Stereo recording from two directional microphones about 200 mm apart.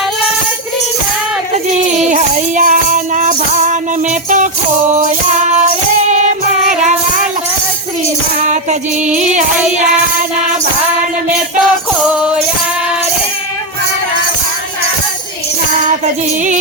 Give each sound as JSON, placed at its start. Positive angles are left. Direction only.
{"t": 2.0, "sound": "music", "side_deg": -40}